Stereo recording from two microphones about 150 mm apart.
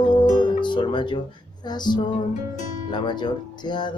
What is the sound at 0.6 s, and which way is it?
Speech, 30° left (ahead or behind).